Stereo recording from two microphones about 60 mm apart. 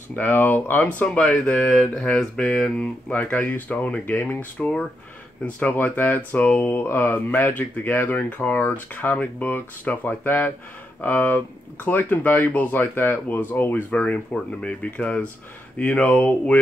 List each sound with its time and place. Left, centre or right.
0.1 s speech: left
0.8 s speech: left
3.1 s speech: left
4.0 s speech: left